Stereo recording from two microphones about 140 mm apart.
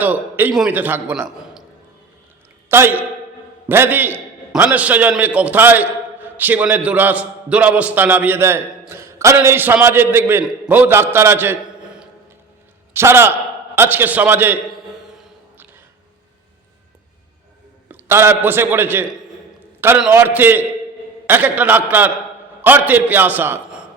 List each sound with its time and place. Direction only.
0.0 s a man's voice: 10° right (ahead or behind)
2.6 s a man's voice: 15° right (ahead or behind)
17.8 s a man's voice: 15° right (ahead or behind)